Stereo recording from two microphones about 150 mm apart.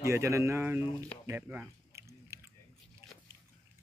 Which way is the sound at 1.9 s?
20° right (ahead or behind).